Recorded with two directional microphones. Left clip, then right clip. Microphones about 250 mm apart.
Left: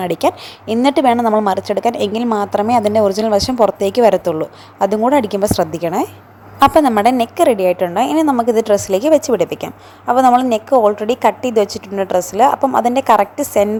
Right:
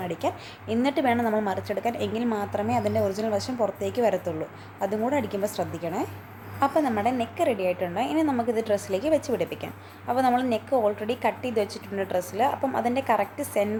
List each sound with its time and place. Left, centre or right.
0.0 s a woman's voice: left